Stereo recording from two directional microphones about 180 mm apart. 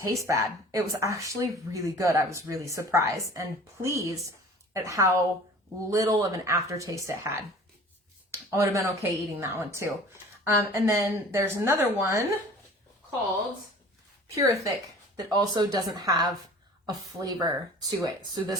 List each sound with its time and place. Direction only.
0.3 s speech: 20° right (ahead or behind)
14.3 s speech: 15° right (ahead or behind)